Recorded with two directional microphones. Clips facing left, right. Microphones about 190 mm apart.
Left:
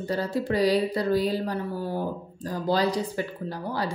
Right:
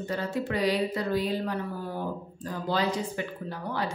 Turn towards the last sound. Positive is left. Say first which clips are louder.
# left 2 dB
turn(degrees=35)  # may be behind; listen again after turning